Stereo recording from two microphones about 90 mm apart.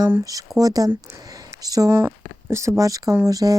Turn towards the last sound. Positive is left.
turn(degrees=-40)  # may be behind; listen again after turning